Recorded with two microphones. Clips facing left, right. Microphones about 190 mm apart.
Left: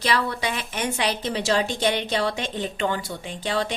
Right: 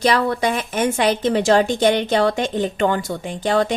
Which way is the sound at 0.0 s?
45° right (ahead or behind).